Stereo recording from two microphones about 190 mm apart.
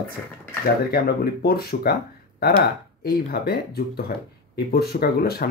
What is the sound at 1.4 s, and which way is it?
Speech, 55° left (ahead or behind).